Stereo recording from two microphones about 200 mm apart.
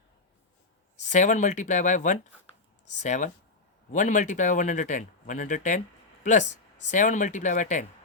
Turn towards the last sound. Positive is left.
turn(degrees=40)  # may be behind; listen again after turning